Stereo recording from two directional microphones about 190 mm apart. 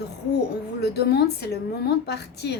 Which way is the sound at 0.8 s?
60° left (ahead or behind).